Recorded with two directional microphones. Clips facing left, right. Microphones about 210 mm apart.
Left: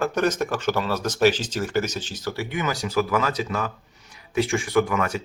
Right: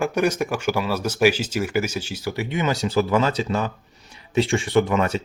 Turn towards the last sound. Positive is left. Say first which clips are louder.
# right 2 dB
turn(degrees=-25)  # may be behind; listen again after turning